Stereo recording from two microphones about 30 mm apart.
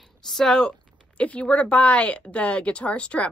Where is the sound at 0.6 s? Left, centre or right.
Left.